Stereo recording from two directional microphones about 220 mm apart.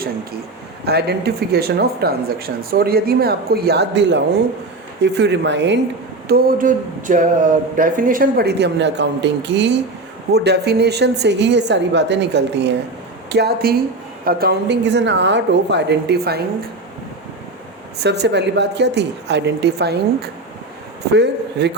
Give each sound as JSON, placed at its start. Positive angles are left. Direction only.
{"t": 0.9, "sound": "speech", "side_deg": -45}
{"t": 18.0, "sound": "speech", "side_deg": -50}